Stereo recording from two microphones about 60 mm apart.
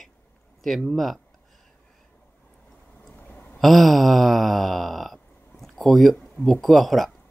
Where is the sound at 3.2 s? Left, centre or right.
Left.